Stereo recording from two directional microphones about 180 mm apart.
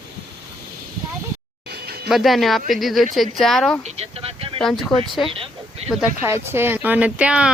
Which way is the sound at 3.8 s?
35° right (ahead or behind).